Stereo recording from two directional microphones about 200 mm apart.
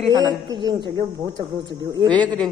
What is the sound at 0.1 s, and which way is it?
Speech, 20° right (ahead or behind).